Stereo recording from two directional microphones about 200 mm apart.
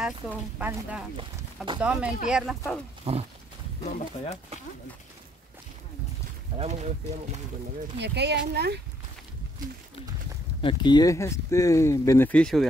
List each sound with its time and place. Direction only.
0.6 s speech: 10° right (ahead or behind)
3.1 s pig: 30° right (ahead or behind)
3.8 s speech: 35° left (ahead or behind)
6.6 s speech: 35° right (ahead or behind)
8.0 s speech: 55° right (ahead or behind)
10.6 s speech: 25° left (ahead or behind); by 12.6 s 5° left (ahead or behind)